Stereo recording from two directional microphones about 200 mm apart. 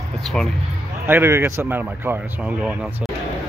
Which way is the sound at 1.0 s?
10° right (ahead or behind).